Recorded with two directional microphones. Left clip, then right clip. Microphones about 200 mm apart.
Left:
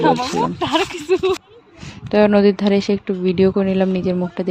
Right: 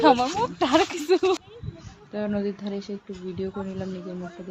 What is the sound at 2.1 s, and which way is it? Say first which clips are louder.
Speech: left 16 dB; 50° left (ahead or behind).